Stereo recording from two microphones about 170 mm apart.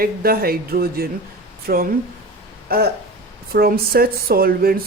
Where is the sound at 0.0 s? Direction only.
60° right (ahead or behind).